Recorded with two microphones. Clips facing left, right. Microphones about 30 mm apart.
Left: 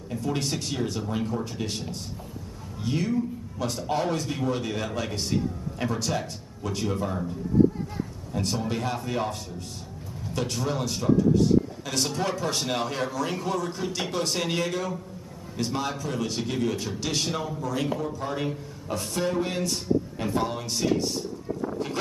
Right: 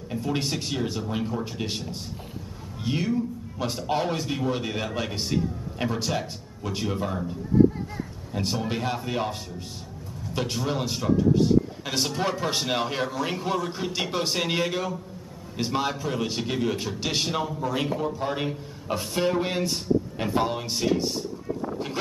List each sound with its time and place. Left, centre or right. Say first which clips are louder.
0.1 s a man's voice: right 1 dB; centre